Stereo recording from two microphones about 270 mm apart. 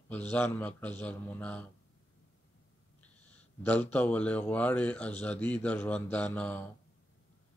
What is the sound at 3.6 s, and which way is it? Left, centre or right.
A man's voice, centre.